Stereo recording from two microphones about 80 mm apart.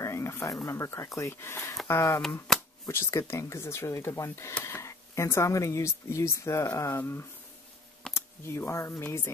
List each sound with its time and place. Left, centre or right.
0.0 s a sound: left
0.7 s speech: left
7.0 s speech: left